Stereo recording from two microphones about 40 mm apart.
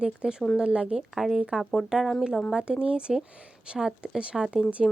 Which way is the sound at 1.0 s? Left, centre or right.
Centre.